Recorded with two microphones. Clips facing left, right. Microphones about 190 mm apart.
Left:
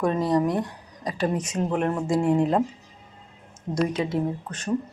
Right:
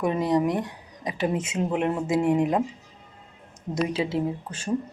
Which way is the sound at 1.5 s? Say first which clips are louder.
Even; 10° right (ahead or behind).